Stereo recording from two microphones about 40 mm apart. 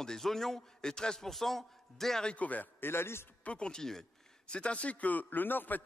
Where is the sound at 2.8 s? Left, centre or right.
Left.